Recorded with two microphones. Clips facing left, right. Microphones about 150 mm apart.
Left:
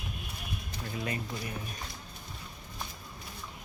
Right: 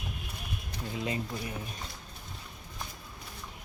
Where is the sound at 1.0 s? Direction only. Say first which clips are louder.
Right 2 dB; 20° right (ahead or behind).